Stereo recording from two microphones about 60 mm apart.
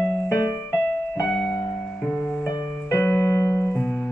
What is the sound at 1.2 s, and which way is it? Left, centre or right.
Music, centre.